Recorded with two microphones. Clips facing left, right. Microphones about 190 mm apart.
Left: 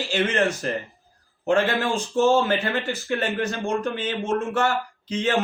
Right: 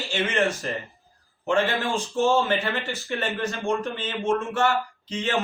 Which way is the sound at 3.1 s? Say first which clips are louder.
Left 2 dB; 45° left (ahead or behind).